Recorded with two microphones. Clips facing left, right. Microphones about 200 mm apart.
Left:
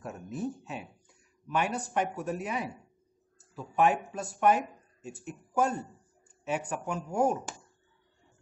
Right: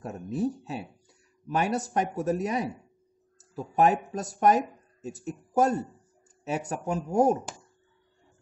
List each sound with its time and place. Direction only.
0.0 s speech: 35° right (ahead or behind)